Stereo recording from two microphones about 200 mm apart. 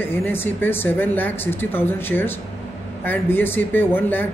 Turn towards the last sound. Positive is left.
turn(degrees=10)  # may be behind; listen again after turning